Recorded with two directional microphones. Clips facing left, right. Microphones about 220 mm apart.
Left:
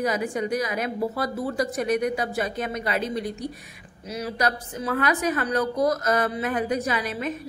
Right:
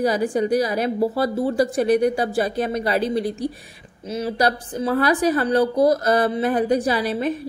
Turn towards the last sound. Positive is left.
turn(degrees=-35)  # may be behind; listen again after turning